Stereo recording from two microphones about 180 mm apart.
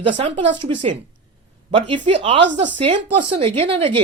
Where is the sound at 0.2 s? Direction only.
30° right (ahead or behind).